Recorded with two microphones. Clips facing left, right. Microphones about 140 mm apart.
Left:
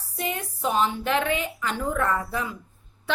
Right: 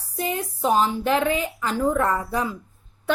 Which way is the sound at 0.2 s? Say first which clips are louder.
Right 4 dB; 35° right (ahead or behind).